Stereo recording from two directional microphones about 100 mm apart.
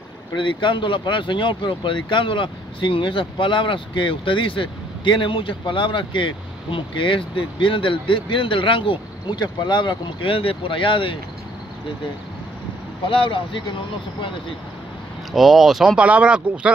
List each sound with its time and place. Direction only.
0.4 s speech: 55° left (ahead or behind)
13.0 s speech: 60° left (ahead or behind)
15.3 s speech: centre (ahead or behind)